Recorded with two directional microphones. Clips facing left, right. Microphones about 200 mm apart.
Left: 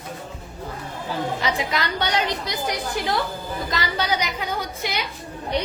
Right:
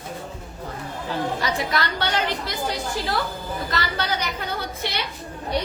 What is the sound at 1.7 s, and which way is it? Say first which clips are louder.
A woman's voice: even; 15° left (ahead or behind).